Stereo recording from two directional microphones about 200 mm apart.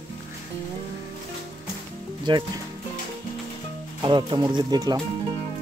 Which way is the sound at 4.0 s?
25° right (ahead or behind).